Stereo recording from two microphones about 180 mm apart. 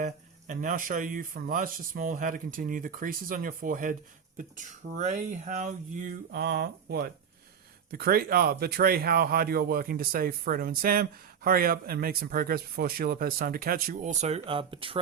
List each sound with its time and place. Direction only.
0.0 s speech: 45° right (ahead or behind); by 15.0 s 30° right (ahead or behind)